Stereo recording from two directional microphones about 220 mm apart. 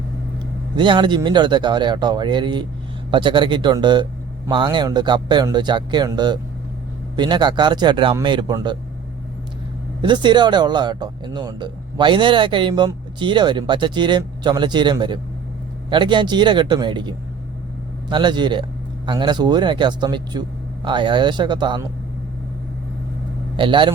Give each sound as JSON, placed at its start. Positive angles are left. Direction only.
{"t": 0.8, "sound": "speech", "side_deg": -20}
{"t": 10.0, "sound": "speech", "side_deg": -20}
{"t": 23.6, "sound": "speech", "side_deg": -20}